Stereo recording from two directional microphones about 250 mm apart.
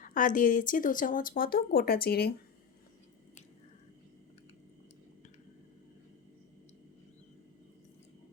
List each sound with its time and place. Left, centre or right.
0.0 s speech: left